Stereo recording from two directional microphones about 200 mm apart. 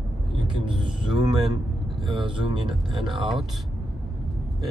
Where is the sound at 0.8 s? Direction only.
25° right (ahead or behind).